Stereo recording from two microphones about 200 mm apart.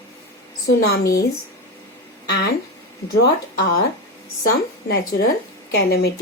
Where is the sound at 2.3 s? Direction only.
55° left (ahead or behind).